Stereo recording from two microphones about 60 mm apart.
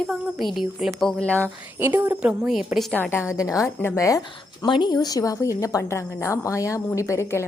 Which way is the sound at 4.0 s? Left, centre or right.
Left.